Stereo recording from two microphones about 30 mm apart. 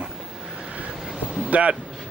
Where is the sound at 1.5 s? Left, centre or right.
Right.